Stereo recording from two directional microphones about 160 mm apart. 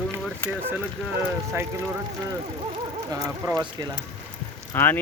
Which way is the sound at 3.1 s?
20° right (ahead or behind).